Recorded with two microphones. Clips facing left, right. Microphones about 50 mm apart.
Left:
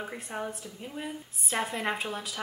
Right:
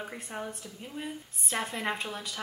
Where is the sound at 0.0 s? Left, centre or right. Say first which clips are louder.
Left 2 dB; centre.